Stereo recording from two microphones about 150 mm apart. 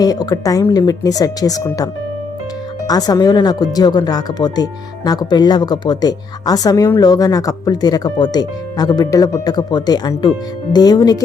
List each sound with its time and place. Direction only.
0.0 s speech: 25° left (ahead or behind)